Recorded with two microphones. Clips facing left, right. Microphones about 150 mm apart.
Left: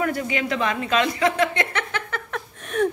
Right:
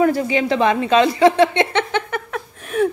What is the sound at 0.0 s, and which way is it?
A woman's voice, 30° right (ahead or behind).